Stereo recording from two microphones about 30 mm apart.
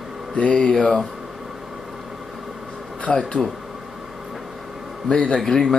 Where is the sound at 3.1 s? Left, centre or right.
Centre.